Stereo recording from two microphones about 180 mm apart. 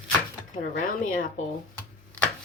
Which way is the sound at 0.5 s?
45° left (ahead or behind).